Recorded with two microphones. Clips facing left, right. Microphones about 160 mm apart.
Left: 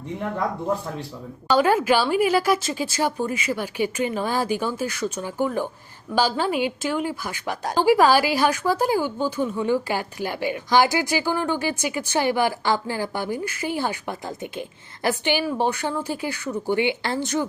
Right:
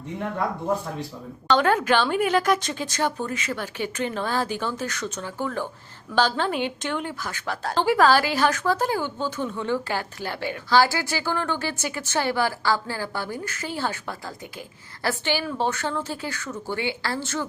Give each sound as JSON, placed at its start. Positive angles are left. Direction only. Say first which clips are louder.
{"t": 1.5, "sound": "a woman's voice", "louder": "left 2 dB", "side_deg": 10}